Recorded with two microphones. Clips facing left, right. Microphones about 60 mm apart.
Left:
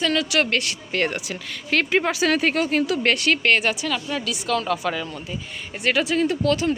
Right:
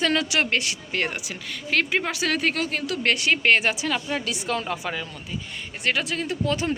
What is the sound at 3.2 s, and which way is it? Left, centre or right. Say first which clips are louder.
A woman's voice: left 1 dB; centre.